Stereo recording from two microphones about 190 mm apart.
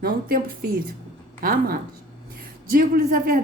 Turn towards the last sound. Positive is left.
turn(degrees=-45)  # may be behind; listen again after turning